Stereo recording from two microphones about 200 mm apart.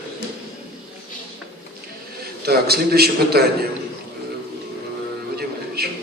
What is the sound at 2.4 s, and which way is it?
A man's voice, 50° right (ahead or behind).